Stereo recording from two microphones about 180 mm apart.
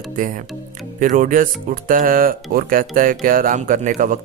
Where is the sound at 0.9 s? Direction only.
45° right (ahead or behind).